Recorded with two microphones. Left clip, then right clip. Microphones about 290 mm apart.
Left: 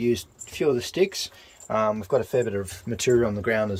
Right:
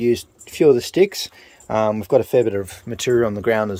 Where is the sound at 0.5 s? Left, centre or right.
Centre.